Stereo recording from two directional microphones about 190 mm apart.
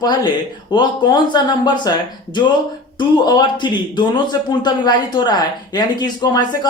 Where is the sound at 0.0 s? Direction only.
20° left (ahead or behind).